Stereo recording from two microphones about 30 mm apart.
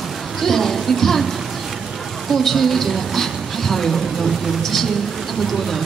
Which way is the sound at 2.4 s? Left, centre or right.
Centre.